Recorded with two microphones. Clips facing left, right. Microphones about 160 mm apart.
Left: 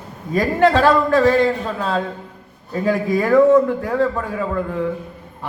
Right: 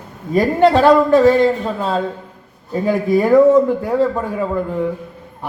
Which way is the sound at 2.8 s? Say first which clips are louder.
Right 3 dB; 20° right (ahead or behind).